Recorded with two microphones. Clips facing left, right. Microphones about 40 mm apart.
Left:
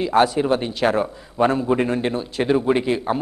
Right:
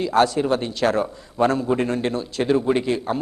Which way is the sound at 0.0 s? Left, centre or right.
Centre.